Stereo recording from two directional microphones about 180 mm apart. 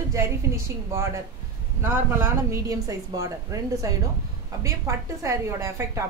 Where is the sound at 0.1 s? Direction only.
15° right (ahead or behind).